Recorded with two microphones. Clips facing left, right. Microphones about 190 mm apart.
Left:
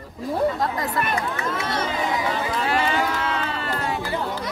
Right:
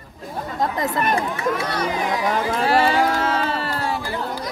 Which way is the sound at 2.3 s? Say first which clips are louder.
Right 4 dB; 40° right (ahead or behind).